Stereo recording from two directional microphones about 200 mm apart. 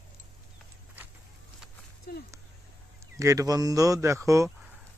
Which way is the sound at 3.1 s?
15° right (ahead or behind).